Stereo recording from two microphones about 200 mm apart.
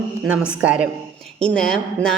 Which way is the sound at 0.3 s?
5° right (ahead or behind).